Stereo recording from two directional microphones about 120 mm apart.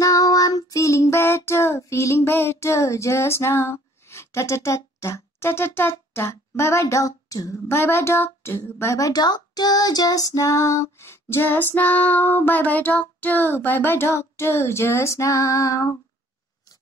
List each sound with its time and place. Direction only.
0.0 s child singing: 30° left (ahead or behind)